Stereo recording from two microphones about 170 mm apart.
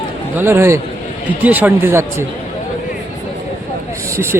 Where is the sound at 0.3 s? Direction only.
15° right (ahead or behind).